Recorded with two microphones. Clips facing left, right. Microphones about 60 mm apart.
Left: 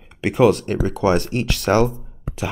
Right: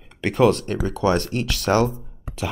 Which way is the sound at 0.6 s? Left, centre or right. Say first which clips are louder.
Left 2 dB; left.